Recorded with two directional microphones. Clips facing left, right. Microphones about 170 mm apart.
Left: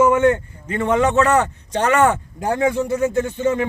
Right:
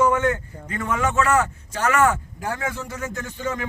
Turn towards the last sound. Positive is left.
turn(degrees=25)  # may be behind; listen again after turning